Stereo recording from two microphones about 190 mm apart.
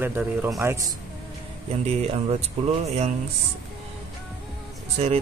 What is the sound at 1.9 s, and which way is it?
Speech, 35° right (ahead or behind).